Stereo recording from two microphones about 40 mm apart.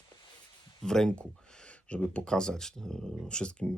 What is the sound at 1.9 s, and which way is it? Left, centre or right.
Speech, left.